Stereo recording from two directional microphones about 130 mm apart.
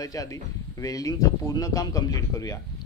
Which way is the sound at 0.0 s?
25° left (ahead or behind).